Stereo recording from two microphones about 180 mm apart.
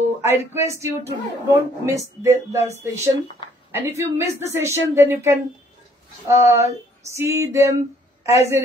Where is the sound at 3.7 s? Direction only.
15° right (ahead or behind).